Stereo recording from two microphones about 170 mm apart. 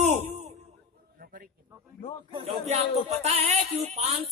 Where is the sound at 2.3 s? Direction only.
35° right (ahead or behind).